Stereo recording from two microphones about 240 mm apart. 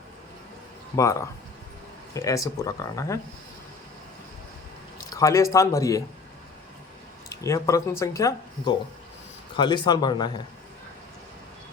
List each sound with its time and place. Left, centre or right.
0.9 s speech: centre
5.1 s speech: centre
7.3 s speech: centre